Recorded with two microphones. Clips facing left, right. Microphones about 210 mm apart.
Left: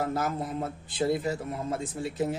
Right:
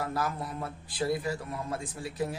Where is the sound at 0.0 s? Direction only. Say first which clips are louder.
Left 3 dB; 25° left (ahead or behind).